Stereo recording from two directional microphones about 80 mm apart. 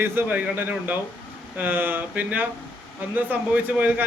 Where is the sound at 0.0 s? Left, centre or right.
Right.